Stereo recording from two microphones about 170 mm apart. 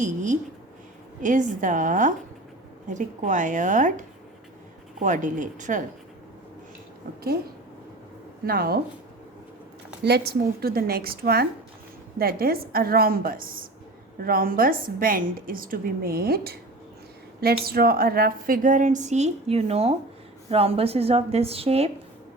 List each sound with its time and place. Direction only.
0.0 s speech: 45° right (ahead or behind)
8.4 s a woman's voice: 60° right (ahead or behind)
10.0 s a woman's voice: 70° right (ahead or behind); by 21.8 s 35° right (ahead or behind)